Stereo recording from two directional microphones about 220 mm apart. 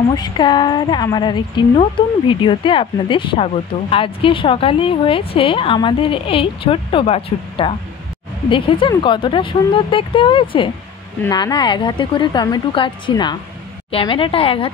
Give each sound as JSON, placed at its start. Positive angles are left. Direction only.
{"t": 0.1, "sound": "a woman's voice", "side_deg": 20}